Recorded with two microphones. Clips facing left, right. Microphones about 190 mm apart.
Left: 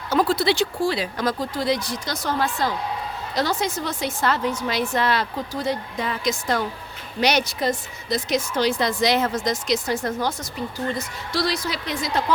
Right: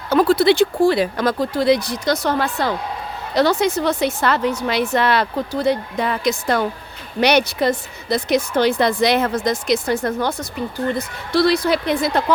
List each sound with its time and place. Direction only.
0.1 s a woman's voice: 60° right (ahead or behind)